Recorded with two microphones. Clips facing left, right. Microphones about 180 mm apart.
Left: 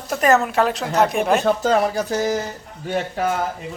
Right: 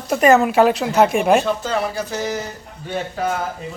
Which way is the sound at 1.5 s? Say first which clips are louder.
Left 4 dB; 45° left (ahead or behind).